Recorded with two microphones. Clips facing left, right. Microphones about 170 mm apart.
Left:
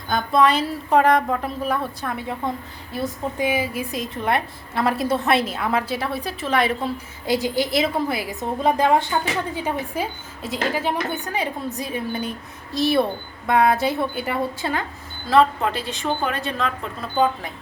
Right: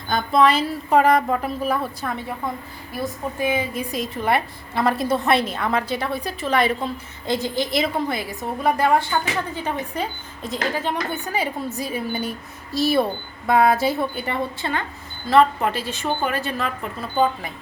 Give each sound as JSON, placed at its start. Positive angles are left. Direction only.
{"t": 0.1, "sound": "a woman's voice", "side_deg": 0}
{"t": 3.3, "sound": "a woman's voice", "side_deg": 10}
{"t": 8.3, "sound": "a woman's voice", "side_deg": 20}
{"t": 9.6, "sound": "a woman's voice", "side_deg": 10}